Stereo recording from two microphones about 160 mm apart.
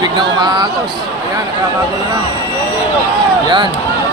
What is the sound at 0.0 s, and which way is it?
Speech, 25° right (ahead or behind).